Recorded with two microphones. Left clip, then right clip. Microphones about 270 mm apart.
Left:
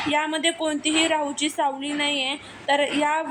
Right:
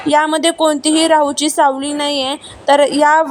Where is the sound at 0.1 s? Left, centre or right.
Right.